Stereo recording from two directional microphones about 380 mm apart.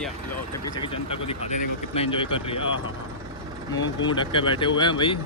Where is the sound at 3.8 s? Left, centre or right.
Centre.